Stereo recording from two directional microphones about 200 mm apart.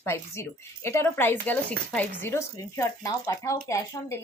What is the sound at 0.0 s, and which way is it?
Speech, 15° left (ahead or behind).